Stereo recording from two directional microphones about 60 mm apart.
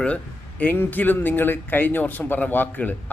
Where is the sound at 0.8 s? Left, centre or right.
Left.